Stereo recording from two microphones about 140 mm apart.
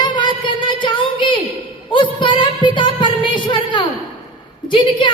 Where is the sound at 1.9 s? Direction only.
35° left (ahead or behind).